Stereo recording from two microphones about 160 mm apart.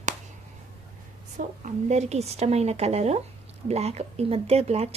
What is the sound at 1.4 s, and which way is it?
Speech, 50° right (ahead or behind).